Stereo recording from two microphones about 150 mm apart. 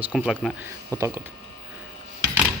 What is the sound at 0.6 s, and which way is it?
Speech, 15° right (ahead or behind).